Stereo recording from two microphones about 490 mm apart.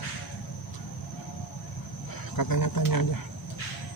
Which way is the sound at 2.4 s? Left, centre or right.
Left.